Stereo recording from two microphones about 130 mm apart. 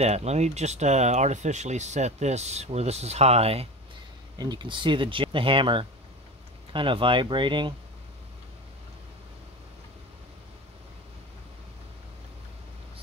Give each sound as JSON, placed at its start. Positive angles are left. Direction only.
{"t": 0.0, "sound": "speech", "side_deg": -55}
{"t": 4.4, "sound": "speech", "side_deg": -35}